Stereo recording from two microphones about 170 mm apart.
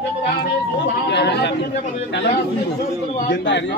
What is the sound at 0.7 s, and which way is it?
Speech, 80° left.